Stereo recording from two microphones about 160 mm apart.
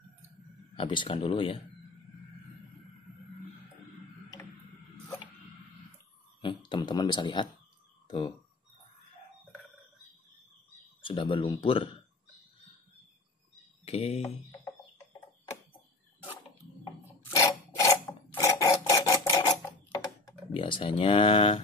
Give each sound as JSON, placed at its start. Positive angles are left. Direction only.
{"t": 0.7, "sound": "speech", "side_deg": 30}
{"t": 4.4, "sound": "tick-tock", "side_deg": 15}
{"t": 6.7, "sound": "speech", "side_deg": 25}
{"t": 11.0, "sound": "speech", "side_deg": 30}
{"t": 13.8, "sound": "speech", "side_deg": 40}
{"t": 16.8, "sound": "filing", "side_deg": 20}